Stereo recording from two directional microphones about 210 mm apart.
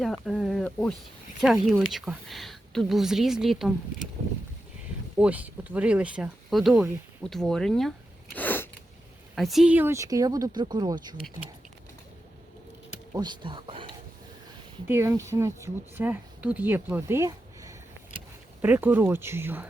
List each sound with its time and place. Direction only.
0.0 s speech: centre (ahead or behind)
5.1 s speech: 5° right (ahead or behind)
8.4 s a sound: 10° left (ahead or behind)
9.3 s speech: centre (ahead or behind); by 11.1 s 20° right (ahead or behind)
13.1 s speech: 20° right (ahead or behind)
14.8 s speech: 10° right (ahead or behind)